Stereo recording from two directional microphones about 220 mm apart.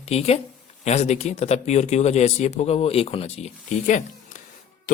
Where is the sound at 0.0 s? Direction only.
30° left (ahead or behind).